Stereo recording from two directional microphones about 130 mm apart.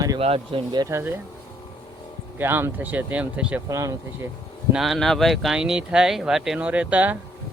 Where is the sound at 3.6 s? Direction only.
25° right (ahead or behind).